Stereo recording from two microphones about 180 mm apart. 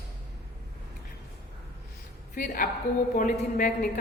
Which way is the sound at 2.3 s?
50° left (ahead or behind).